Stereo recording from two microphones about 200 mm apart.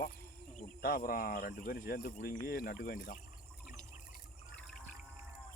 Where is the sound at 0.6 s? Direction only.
45° left (ahead or behind).